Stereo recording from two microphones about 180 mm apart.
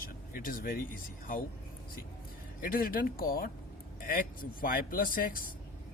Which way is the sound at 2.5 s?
50° left (ahead or behind).